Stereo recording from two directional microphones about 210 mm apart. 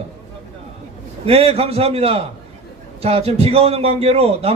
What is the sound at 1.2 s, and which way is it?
A man's voice, 30° right (ahead or behind).